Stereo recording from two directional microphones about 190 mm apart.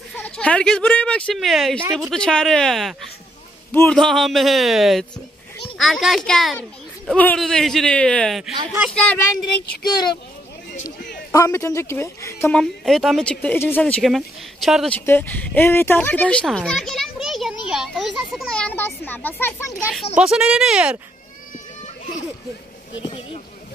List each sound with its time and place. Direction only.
0.1 s speech: 5° left (ahead or behind)
9.8 s speech: 20° left (ahead or behind)
11.3 s speech: 15° left (ahead or behind); by 15.0 s centre (ahead or behind)
15.0 s a child's voice: 10° left (ahead or behind)
20.2 s speech: 5° right (ahead or behind)
23.0 s speech: 30° left (ahead or behind)